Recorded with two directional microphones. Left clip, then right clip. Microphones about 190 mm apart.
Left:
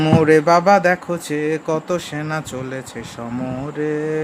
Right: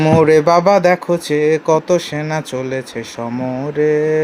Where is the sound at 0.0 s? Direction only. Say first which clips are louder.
Right 3 dB; 20° right (ahead or behind).